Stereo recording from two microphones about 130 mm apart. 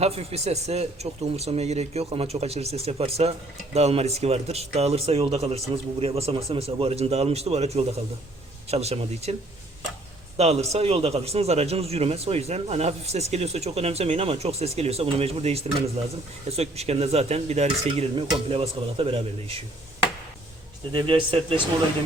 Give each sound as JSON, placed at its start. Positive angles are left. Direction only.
{"t": 0.0, "sound": "a man's voice", "side_deg": -50}
{"t": 10.3, "sound": "a man's voice", "side_deg": -55}
{"t": 20.9, "sound": "a man's voice", "side_deg": -45}